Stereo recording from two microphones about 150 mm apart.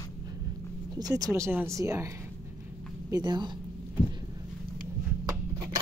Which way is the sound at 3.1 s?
25° right (ahead or behind).